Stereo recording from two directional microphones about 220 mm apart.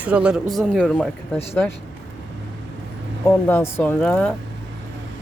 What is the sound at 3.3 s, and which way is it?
Speech, 10° left (ahead or behind).